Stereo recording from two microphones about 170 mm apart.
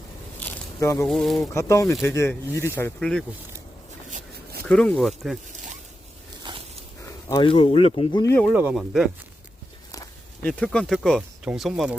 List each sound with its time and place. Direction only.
0.3 s a sound: 15° left (ahead or behind)
1.0 s speech: centre (ahead or behind)
1.4 s speech: 15° left (ahead or behind)
4.6 s speech: 5° left (ahead or behind)
7.3 s speech: 25° left (ahead or behind)
7.5 s speech: 35° left (ahead or behind)
8.2 s speech: 15° left (ahead or behind)
8.5 s speech: 5° right (ahead or behind)
10.4 s speech: 5° left (ahead or behind)